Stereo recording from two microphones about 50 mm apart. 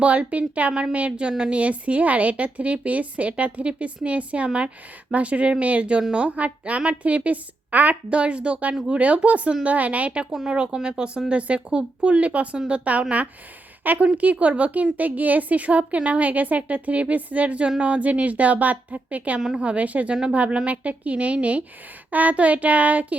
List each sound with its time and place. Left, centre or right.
0.0 s a woman's voice: right
0.7 s a woman's voice: centre